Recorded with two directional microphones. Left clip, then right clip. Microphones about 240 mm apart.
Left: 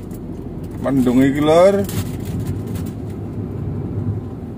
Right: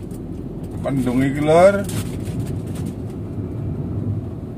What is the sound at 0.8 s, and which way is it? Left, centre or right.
Speech, centre.